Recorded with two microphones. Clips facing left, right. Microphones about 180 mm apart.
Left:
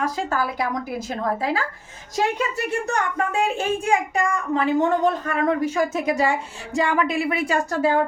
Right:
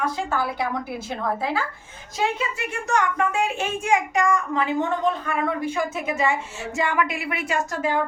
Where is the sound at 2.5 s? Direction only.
35° left (ahead or behind).